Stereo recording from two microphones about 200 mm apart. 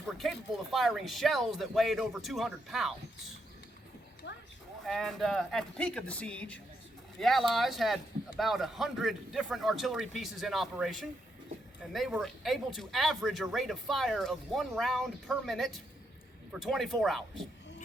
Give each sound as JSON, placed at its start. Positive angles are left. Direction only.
{"t": 0.2, "sound": "a man's voice", "side_deg": 0}
{"t": 4.2, "sound": "horse", "side_deg": 65}
{"t": 4.9, "sound": "a man's voice", "side_deg": 0}